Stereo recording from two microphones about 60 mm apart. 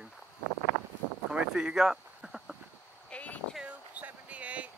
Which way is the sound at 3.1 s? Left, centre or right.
Left.